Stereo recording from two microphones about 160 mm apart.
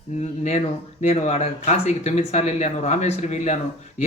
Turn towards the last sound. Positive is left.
turn(degrees=45)  # may be behind; listen again after turning